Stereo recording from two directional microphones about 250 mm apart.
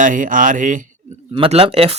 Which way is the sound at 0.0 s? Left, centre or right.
Right.